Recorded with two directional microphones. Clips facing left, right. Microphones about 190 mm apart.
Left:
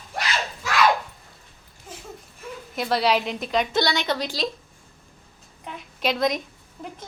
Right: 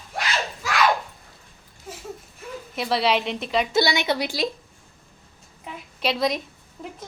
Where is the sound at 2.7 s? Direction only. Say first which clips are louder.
Even; centre (ahead or behind).